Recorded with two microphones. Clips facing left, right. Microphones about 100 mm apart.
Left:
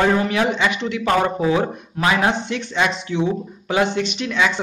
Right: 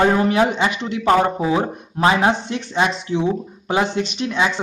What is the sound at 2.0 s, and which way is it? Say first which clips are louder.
A man's voice: right 2 dB; 30° right (ahead or behind).